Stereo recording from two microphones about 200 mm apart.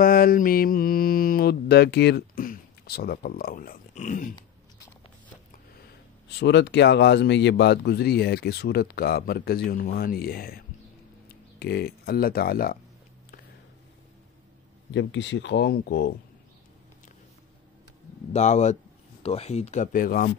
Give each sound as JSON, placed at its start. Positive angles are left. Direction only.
{"t": 0.0, "sound": "mantra", "side_deg": 45}
{"t": 6.4, "sound": "speech", "side_deg": 60}
{"t": 15.0, "sound": "speech", "side_deg": 65}
{"t": 18.3, "sound": "speech", "side_deg": 35}